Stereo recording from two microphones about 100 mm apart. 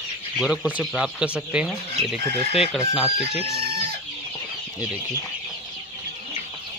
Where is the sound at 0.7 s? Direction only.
10° right (ahead or behind).